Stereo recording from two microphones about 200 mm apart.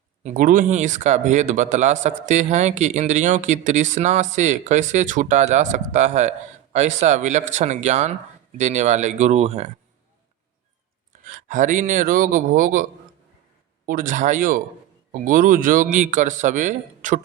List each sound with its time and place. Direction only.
0.2 s speech: 40° right (ahead or behind)
11.3 s speech: 40° right (ahead or behind)